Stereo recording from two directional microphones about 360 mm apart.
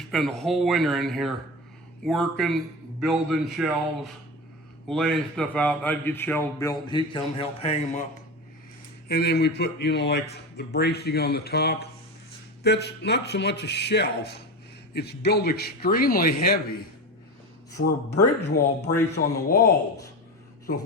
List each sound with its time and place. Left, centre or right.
0.1 s a man's voice: centre; by 19.7 s left